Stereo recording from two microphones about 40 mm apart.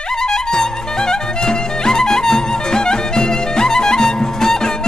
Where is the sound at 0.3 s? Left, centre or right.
Centre.